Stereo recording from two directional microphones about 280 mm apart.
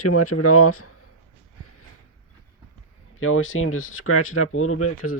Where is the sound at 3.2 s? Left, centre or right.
Left.